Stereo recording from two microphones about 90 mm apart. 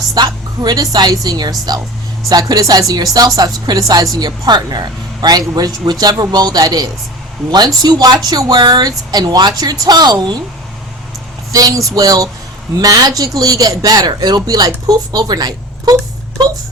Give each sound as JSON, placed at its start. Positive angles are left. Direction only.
{"t": 0.1, "sound": "speech", "side_deg": -45}
{"t": 11.5, "sound": "speech", "side_deg": -40}